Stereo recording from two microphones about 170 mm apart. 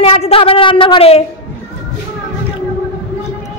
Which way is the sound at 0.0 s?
35° left (ahead or behind).